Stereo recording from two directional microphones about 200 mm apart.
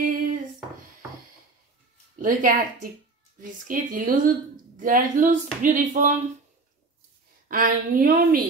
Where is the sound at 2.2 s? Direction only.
40° right (ahead or behind).